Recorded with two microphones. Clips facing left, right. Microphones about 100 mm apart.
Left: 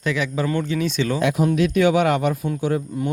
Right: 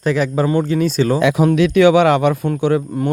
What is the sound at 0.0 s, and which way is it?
Speech, 40° right (ahead or behind).